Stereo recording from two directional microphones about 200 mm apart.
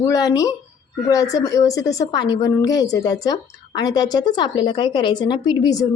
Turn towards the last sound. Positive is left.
turn(degrees=20)  # may be behind; listen again after turning